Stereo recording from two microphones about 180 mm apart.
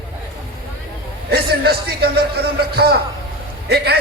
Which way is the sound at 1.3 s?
60° right (ahead or behind).